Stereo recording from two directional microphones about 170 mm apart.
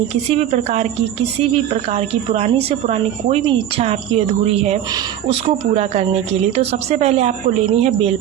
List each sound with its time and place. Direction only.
0.3 s a woman's voice: 40° right (ahead or behind)